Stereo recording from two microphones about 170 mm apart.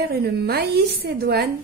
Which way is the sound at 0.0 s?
70° right (ahead or behind).